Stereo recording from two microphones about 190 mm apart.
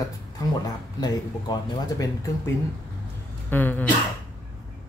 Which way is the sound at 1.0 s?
20° left (ahead or behind).